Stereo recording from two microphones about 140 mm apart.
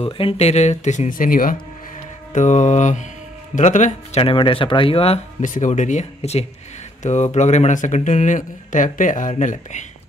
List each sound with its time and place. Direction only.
0.0 s speech: 45° left (ahead or behind); by 1.6 s 80° left
2.3 s speech: 60° left (ahead or behind); by 5.2 s 45° left (ahead or behind)
5.4 s speech: 65° left (ahead or behind)